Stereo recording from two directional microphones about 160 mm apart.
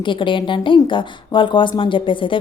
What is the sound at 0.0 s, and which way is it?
Speech, 30° left (ahead or behind).